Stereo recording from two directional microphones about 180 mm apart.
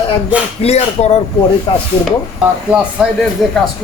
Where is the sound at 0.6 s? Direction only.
35° left (ahead or behind).